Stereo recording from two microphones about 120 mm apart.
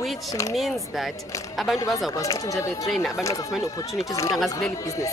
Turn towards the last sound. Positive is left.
turn(degrees=0)  # may be behind; listen again after turning